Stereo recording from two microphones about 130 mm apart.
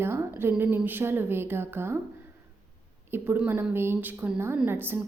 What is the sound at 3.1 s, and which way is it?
A woman's voice, 15° right (ahead or behind).